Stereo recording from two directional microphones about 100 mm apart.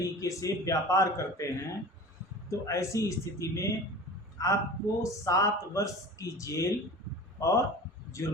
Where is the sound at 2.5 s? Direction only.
30° left (ahead or behind).